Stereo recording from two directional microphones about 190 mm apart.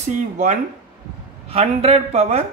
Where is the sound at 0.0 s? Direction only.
40° right (ahead or behind).